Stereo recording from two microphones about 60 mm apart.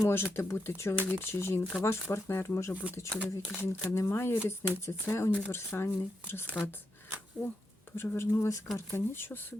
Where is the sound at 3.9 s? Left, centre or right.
Left.